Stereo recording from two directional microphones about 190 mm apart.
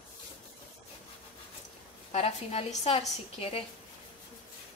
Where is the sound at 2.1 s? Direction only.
30° left (ahead or behind).